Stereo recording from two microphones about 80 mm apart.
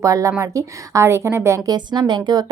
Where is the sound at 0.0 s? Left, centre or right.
Right.